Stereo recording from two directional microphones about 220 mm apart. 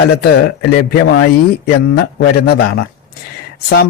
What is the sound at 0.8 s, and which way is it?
A man's voice, 45° left (ahead or behind).